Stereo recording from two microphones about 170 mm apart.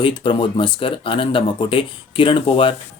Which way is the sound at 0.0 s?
30° left (ahead or behind).